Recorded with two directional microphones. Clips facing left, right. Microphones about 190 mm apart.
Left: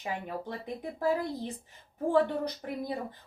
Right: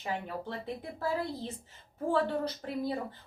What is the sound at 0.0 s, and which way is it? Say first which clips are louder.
A woman's voice: even; 15° left (ahead or behind).